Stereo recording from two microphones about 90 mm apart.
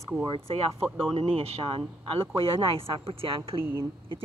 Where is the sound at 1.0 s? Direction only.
90° right.